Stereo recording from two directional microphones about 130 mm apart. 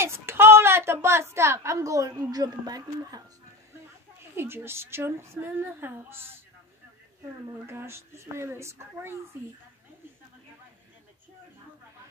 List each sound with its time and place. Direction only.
0.0 s a woman's voice: 20° right (ahead or behind)
4.2 s speech: 20° right (ahead or behind)
7.6 s a woman's voice: 20° right (ahead or behind)